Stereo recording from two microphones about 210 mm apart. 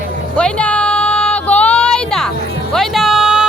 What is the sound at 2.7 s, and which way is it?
Music, centre (ahead or behind).